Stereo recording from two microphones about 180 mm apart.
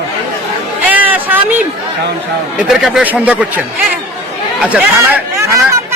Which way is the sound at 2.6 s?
5° right (ahead or behind).